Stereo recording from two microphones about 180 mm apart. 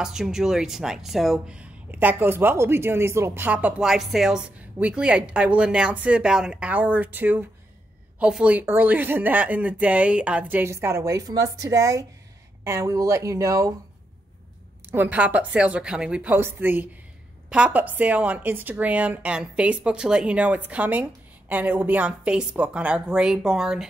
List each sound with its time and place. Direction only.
0.0 s speech: 5° right (ahead or behind); by 13.7 s 20° right (ahead or behind)
14.9 s speech: 10° right (ahead or behind)